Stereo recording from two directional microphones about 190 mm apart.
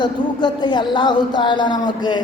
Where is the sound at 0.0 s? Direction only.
25° left (ahead or behind).